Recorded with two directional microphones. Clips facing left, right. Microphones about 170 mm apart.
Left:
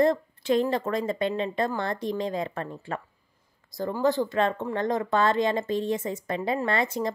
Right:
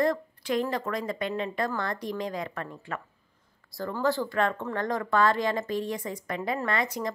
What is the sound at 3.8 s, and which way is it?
A woman's voice, 20° left (ahead or behind).